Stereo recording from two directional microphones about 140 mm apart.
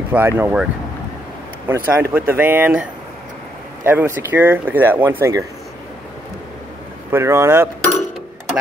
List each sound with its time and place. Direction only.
0.1 s speech: 15° right (ahead or behind)
1.7 s speech: 15° right (ahead or behind)
3.8 s speech: 15° right (ahead or behind)
7.1 s speech: 20° right (ahead or behind)